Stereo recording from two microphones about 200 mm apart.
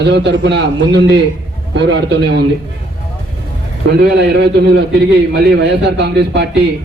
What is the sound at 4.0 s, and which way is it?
A man's voice, 55° right (ahead or behind).